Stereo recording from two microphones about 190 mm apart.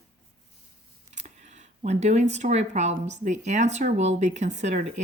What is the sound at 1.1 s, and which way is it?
Speech, 40° right (ahead or behind).